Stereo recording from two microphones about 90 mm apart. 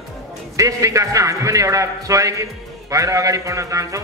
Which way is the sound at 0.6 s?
35° right (ahead or behind).